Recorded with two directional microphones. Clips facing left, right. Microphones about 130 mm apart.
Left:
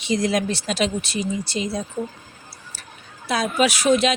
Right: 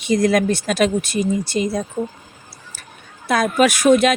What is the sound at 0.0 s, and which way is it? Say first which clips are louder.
Speech: right 5 dB; 55° right (ahead or behind).